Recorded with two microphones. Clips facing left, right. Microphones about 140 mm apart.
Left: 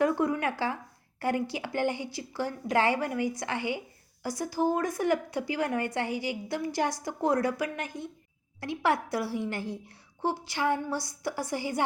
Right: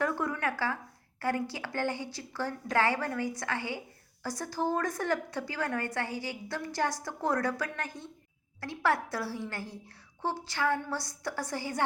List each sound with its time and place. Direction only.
0.0 s a woman's voice: 15° left (ahead or behind)